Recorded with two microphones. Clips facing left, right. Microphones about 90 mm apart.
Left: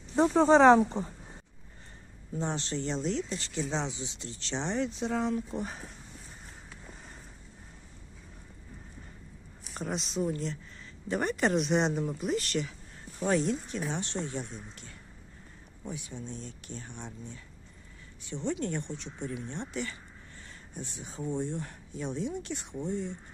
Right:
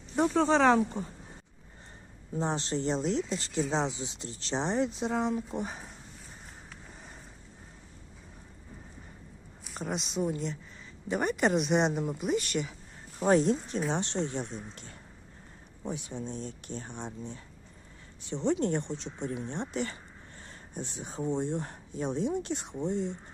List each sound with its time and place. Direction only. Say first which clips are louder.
0.4 s speech: left 6 dB; 25° left (ahead or behind)
2.4 s speech: right 3 dB; 30° right (ahead or behind)
5.0 s speech: even; 15° right (ahead or behind)
9.7 s speech: even; 5° right (ahead or behind)
13.1 s speech: right 4 dB; 30° right (ahead or behind)
15.8 s speech: right 4 dB; 25° right (ahead or behind)
16.9 s speech: right 4 dB; 20° right (ahead or behind)
21.6 s speech: right 2 dB; 35° right (ahead or behind)
22.0 s speech: right 4 dB; 20° right (ahead or behind)